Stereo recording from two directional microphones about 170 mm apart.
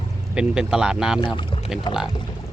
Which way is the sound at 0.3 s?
5° right (ahead or behind).